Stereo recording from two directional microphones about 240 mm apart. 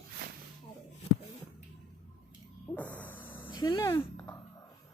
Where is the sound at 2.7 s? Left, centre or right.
Centre.